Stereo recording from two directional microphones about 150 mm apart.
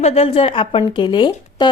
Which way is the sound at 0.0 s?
40° left (ahead or behind).